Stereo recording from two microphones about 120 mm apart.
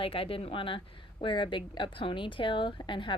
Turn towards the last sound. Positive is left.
turn(degrees=45)  # may be behind; listen again after turning